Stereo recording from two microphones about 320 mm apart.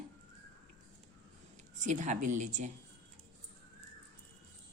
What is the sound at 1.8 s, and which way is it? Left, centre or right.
Speech, right.